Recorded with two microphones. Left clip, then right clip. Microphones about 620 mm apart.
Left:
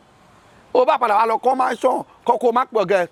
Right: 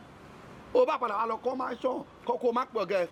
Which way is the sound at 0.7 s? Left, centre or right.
Left.